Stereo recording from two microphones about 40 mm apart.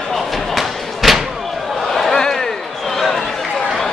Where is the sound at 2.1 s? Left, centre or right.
Centre.